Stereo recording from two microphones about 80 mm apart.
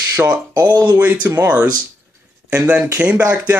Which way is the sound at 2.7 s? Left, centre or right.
Centre.